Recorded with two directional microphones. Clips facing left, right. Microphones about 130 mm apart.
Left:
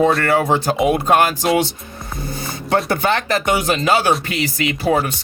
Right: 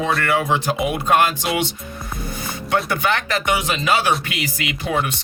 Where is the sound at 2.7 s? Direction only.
35° left (ahead or behind).